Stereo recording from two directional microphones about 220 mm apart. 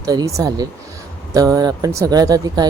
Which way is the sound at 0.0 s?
15° right (ahead or behind).